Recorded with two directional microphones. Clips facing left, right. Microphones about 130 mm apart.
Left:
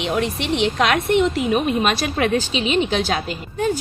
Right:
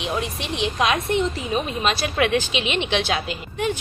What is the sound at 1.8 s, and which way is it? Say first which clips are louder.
A woman's voice: left 2 dB; 45° left (ahead or behind).